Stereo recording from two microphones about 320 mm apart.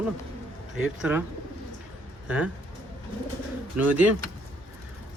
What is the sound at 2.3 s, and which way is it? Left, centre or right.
Speech, centre.